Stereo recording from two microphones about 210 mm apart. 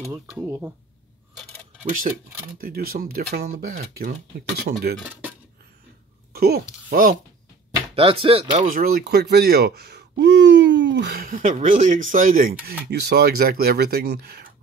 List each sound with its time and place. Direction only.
0.1 s speech: 10° right (ahead or behind)
1.3 s coin: 5° left (ahead or behind)
1.9 s speech: 40° right (ahead or behind)
6.3 s speech: 45° right (ahead or behind)
7.9 s speech: 25° right (ahead or behind)
8.6 s speech: 40° right (ahead or behind)